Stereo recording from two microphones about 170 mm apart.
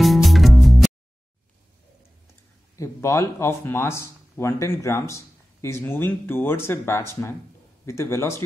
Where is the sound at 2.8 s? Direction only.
15° left (ahead or behind).